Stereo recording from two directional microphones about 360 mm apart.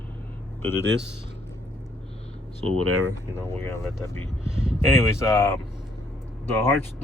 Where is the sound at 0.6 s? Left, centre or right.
Centre.